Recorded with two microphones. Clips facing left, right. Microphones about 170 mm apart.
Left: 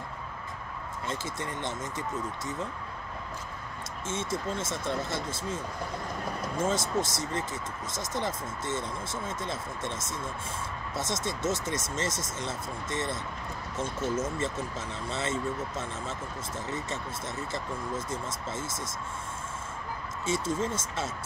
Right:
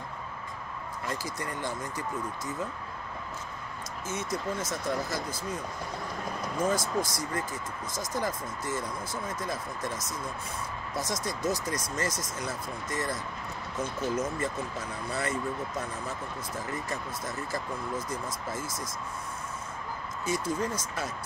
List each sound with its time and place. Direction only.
1.0 s speech: 25° left (ahead or behind)
4.1 s speech: 25° left (ahead or behind)
20.2 s speech: 25° left (ahead or behind)